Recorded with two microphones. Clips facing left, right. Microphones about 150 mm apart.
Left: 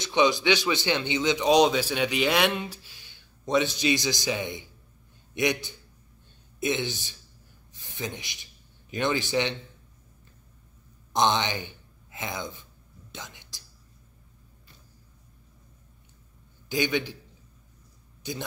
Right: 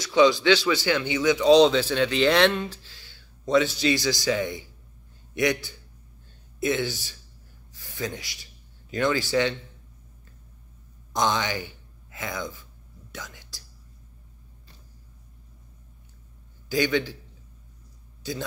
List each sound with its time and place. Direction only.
0.0 s a man's voice: 20° left (ahead or behind)
7.7 s a sound: 20° left (ahead or behind)
8.9 s a man's voice: 20° left (ahead or behind)
11.1 s speech: 25° left (ahead or behind)
16.6 s a man's voice: 20° left (ahead or behind)
18.2 s a man's voice: 20° left (ahead or behind)